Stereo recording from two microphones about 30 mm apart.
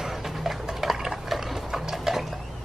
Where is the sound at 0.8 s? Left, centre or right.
Centre.